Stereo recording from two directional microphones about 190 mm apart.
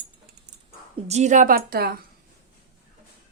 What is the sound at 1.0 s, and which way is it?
Speech, 35° right (ahead or behind).